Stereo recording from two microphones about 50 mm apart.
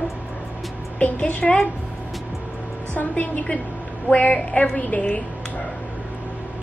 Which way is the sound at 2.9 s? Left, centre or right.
Left.